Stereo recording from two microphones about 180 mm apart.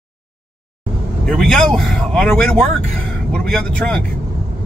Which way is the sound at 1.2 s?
5° left (ahead or behind).